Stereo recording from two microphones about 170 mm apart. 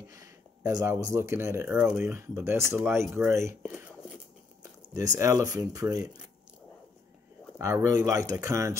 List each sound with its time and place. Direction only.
0.1 s speech: 20° right (ahead or behind)
3.6 s a sound: 5° right (ahead or behind)
4.9 s speech: 15° right (ahead or behind)
7.5 s speech: 15° right (ahead or behind)